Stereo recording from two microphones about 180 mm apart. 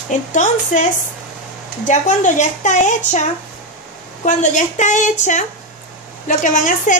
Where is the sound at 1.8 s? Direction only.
45° left (ahead or behind).